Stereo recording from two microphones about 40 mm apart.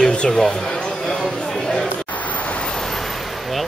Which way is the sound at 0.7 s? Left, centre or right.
Left.